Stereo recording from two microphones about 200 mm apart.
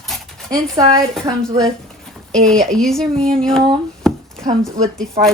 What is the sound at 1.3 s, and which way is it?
Speech, 20° right (ahead or behind).